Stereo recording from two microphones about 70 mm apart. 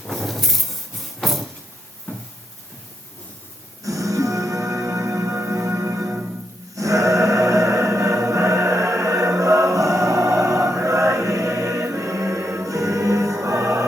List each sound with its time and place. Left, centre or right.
0.1 s a sound: centre
3.8 s music: right
6.1 s music: right
6.7 s music: right